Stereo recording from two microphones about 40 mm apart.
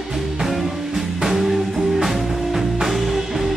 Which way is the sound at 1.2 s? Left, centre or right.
Centre.